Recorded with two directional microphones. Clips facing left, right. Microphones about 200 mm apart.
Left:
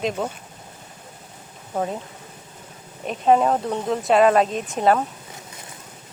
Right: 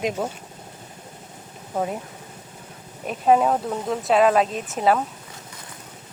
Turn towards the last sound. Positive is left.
turn(degrees=0)  # may be behind; listen again after turning